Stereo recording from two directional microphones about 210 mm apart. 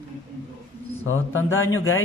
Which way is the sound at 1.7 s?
75° left (ahead or behind).